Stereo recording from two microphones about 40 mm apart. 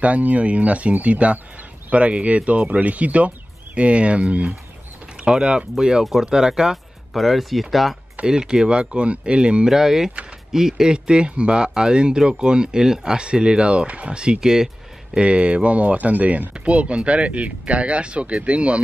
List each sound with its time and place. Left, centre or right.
0.0 s speech: right; by 6.8 s centre
7.2 s speech: centre
8.3 s speech: centre
9.7 s speech: centre
15.1 s speech: right
16.5 s speech: right